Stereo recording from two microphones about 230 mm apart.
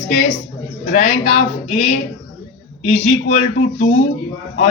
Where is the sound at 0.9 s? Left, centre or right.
Left.